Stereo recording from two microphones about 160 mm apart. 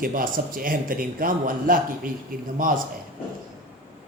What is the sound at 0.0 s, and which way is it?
A man's voice, 60° right (ahead or behind).